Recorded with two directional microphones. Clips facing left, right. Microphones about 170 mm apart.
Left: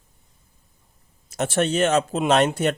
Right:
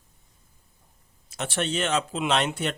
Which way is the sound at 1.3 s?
45° left (ahead or behind).